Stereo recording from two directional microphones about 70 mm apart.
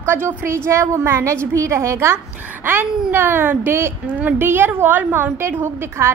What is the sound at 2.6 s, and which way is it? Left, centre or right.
A woman's voice, right.